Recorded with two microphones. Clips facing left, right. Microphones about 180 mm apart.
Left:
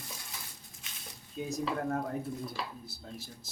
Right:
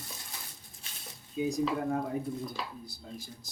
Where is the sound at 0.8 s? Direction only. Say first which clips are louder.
Right 1 dB; 35° right (ahead or behind).